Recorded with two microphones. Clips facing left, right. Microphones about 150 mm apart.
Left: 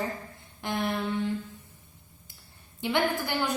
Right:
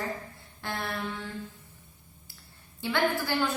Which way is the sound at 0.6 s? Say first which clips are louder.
Left 5 dB; 15° left (ahead or behind).